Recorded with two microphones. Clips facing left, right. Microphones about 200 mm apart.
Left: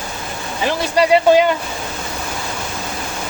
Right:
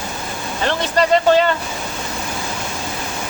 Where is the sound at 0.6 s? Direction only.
10° left (ahead or behind).